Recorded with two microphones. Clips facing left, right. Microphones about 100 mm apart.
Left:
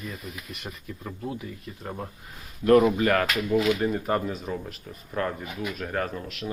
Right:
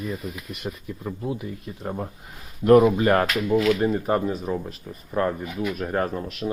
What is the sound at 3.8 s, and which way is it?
A man's voice, 15° right (ahead or behind).